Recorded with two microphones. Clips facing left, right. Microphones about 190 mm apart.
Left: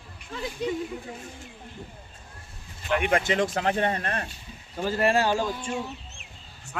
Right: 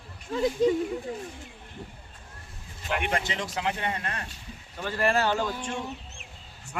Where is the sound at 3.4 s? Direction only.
50° left (ahead or behind).